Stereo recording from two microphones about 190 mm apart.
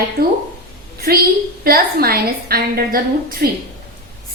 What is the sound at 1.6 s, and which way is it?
A woman's voice, 50° right (ahead or behind).